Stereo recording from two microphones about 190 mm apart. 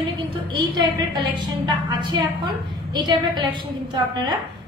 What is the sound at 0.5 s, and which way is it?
A woman's voice, 25° right (ahead or behind).